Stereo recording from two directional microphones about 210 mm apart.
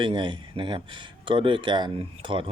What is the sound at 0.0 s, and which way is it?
Speech, 20° right (ahead or behind).